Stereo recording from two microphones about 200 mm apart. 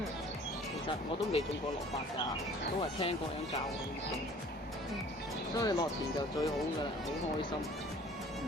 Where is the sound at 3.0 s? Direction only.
30° left (ahead or behind).